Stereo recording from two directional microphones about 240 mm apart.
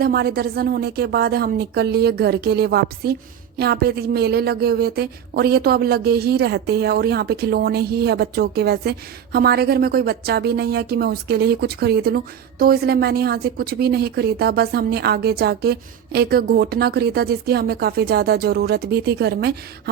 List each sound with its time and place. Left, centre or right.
0.0 s speech: right